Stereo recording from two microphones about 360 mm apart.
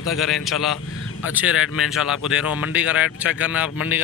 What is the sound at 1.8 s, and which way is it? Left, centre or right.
Speech, centre.